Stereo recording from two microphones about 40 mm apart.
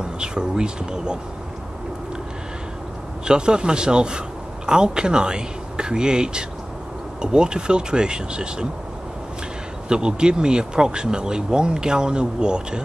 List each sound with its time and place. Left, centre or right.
0.0 s speech: right
3.3 s speech: right
9.8 s speech: right